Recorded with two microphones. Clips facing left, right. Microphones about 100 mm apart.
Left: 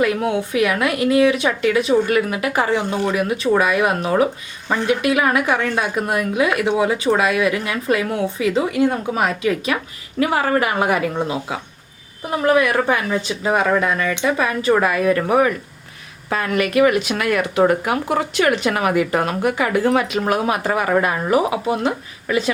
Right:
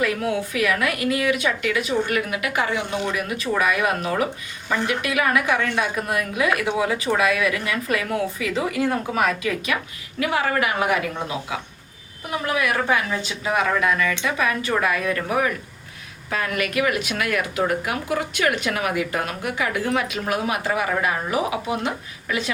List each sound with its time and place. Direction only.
0.0 s a woman's voice: 25° left (ahead or behind)
10.2 s a woman's voice: 40° left (ahead or behind)